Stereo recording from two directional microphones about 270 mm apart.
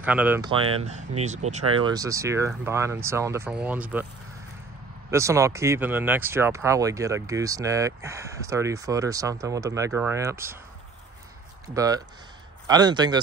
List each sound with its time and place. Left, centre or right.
0.0 s speech: centre
0.8 s speech: right; by 4.1 s centre
5.1 s speech: centre
11.6 s speech: centre